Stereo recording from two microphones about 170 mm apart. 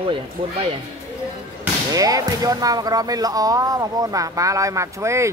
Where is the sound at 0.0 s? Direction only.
30° right (ahead or behind).